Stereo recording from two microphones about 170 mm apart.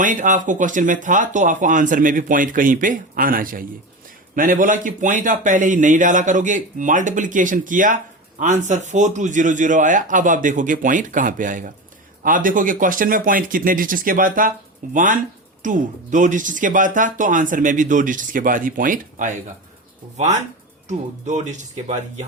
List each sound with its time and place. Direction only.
0.0 s speech: 50° right (ahead or behind)